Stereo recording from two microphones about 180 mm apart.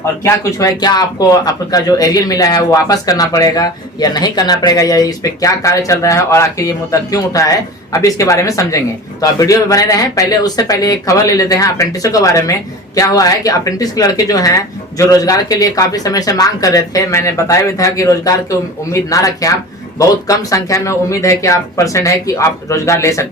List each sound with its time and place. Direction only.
0.4 s speech: 20° left (ahead or behind)